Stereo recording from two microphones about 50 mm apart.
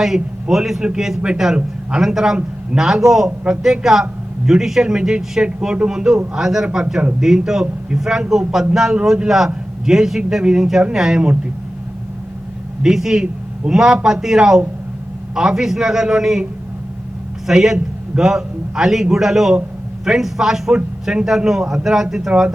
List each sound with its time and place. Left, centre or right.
0.0 s a man's voice: centre
12.8 s a man's voice: centre
17.4 s a man's voice: centre
22.3 s speech: right